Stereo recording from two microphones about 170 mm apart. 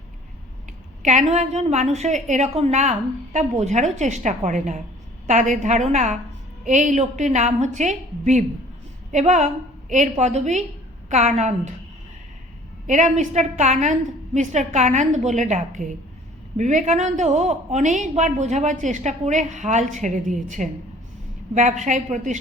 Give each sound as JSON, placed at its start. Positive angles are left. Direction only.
{"t": 1.0, "sound": "a woman's voice", "side_deg": -45}
{"t": 12.9, "sound": "a woman's voice", "side_deg": -45}